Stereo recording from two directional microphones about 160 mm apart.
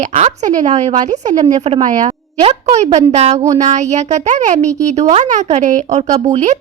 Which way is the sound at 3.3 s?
20° right (ahead or behind).